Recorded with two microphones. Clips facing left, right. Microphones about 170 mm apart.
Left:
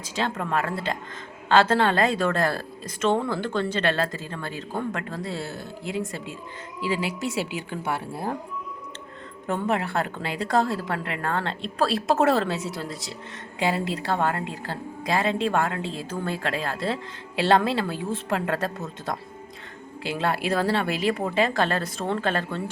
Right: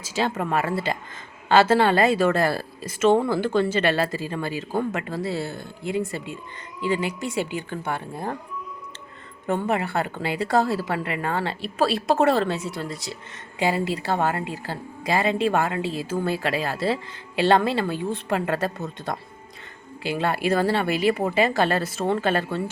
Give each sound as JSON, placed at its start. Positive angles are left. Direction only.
{"t": 0.0, "sound": "a woman's voice", "side_deg": -10}
{"t": 9.5, "sound": "a woman's voice", "side_deg": 0}